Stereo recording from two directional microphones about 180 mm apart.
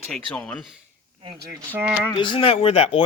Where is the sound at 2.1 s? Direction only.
25° left (ahead or behind).